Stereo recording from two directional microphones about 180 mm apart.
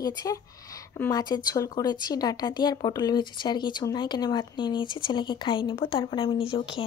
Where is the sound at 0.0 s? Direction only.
20° left (ahead or behind).